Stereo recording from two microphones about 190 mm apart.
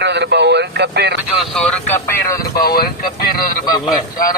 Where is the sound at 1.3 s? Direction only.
5° left (ahead or behind).